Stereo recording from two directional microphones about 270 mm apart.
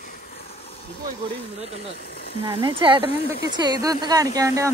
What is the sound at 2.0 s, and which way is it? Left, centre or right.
Speech, left.